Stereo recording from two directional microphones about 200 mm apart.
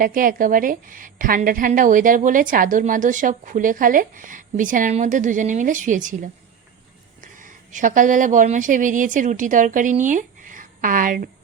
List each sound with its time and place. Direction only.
0.0 s a woman's voice: 45° right (ahead or behind)
7.2 s speech: 40° right (ahead or behind)